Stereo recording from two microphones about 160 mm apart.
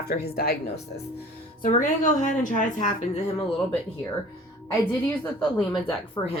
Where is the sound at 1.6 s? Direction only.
50° left (ahead or behind).